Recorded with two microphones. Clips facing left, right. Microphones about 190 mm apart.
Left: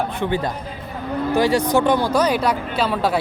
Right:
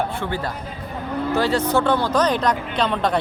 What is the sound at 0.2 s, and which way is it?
Speech, 20° left (ahead or behind).